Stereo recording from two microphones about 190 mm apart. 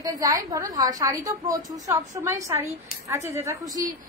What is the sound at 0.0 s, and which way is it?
A woman's voice, 20° right (ahead or behind).